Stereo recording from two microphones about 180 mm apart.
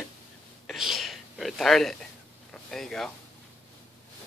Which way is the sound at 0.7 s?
Centre (ahead or behind).